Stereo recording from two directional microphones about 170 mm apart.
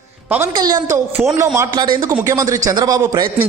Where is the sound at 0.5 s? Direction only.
20° right (ahead or behind).